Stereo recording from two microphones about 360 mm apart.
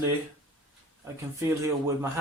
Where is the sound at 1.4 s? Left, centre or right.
Centre.